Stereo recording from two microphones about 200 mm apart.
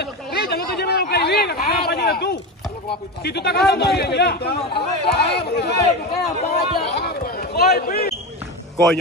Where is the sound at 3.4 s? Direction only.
55° left (ahead or behind).